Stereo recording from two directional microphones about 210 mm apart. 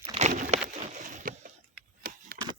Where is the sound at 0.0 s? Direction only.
30° right (ahead or behind).